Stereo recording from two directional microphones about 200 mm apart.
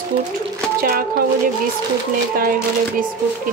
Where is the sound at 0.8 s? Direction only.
45° right (ahead or behind).